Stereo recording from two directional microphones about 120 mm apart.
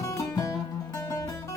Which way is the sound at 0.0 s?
25° left (ahead or behind).